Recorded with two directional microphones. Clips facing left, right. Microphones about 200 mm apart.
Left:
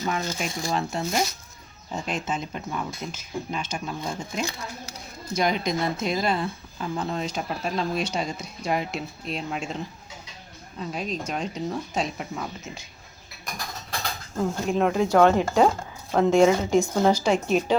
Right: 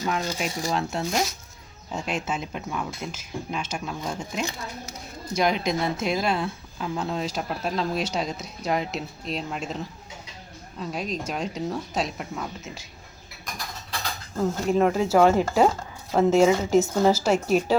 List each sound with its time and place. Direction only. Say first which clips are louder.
0.2 s speech: right 1 dB; 10° right (ahead or behind)
0.6 s speech: even; 5° left (ahead or behind)
5.3 s speech: right 1 dB; centre (ahead or behind)
10.8 s speech: even; centre (ahead or behind)
14.3 s speech: right 2 dB; 5° right (ahead or behind)